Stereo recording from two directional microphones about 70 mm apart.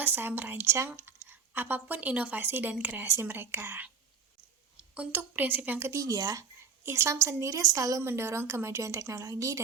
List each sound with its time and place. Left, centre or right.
0.0 s speech: right
5.1 s a woman's voice: right
5.9 s speech: right
6.8 s a woman's voice: right
8.0 s a woman's voice: right